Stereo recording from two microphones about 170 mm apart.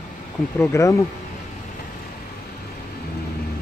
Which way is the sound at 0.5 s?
15° left (ahead or behind).